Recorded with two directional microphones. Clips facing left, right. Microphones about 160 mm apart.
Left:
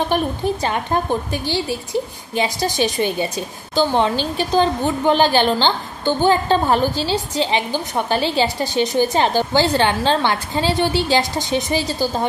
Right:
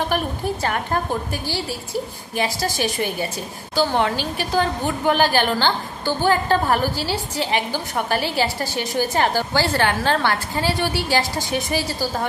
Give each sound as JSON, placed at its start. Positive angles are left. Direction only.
{"t": 0.1, "sound": "a woman's voice", "side_deg": 20}